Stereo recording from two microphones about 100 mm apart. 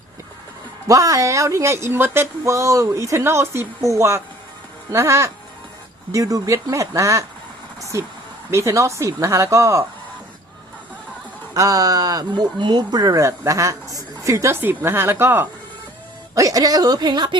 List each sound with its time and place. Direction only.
0.9 s speech: 35° right (ahead or behind)
11.5 s speech: 35° right (ahead or behind)
12.3 s speech: 50° right (ahead or behind); by 15.4 s 20° right (ahead or behind)
16.3 s speech: 35° right (ahead or behind)